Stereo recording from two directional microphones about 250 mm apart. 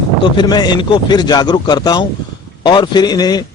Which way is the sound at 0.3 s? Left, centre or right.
Centre.